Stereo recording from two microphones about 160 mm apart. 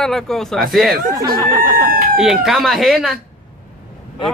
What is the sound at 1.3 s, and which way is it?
Speech, 20° right (ahead or behind).